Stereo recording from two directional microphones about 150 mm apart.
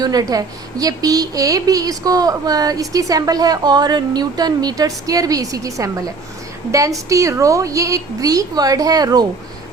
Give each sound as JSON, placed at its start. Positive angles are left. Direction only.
{"t": 0.0, "sound": "a woman's voice", "side_deg": -25}